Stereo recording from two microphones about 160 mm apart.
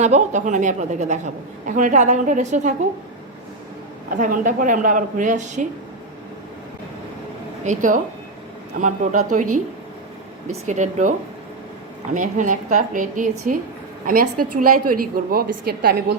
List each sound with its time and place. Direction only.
0.0 s a woman's voice: 50° right (ahead or behind)
4.2 s a woman's voice: 55° right (ahead or behind)
7.6 s a woman's voice: 50° right (ahead or behind)
10.5 s a woman's voice: 50° right (ahead or behind)
12.1 s a woman's voice: 55° right (ahead or behind); by 16.1 s 70° right (ahead or behind)